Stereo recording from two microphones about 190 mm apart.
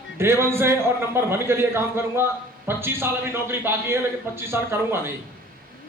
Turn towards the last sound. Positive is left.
turn(degrees=-10)  # may be behind; listen again after turning